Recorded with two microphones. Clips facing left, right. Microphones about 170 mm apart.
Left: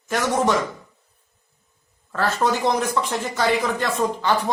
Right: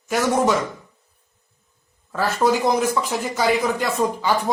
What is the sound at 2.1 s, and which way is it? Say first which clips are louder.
Speech: right 2 dB; 10° right (ahead or behind).